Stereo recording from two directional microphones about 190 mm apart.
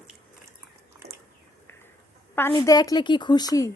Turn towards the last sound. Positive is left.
turn(degrees=20)  # may be behind; listen again after turning